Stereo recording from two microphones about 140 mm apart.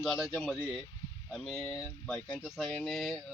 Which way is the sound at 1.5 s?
20° left (ahead or behind).